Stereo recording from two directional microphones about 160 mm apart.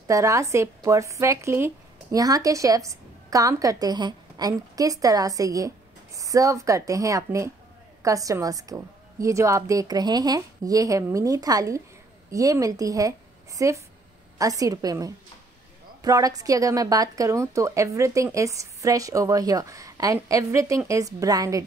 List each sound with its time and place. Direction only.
0.0 s a woman's voice: 20° right (ahead or behind)